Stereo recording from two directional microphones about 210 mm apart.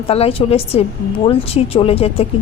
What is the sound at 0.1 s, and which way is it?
A woman's voice, 30° left (ahead or behind).